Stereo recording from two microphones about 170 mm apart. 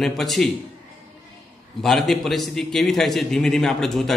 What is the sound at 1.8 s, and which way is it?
A man's voice, centre (ahead or behind).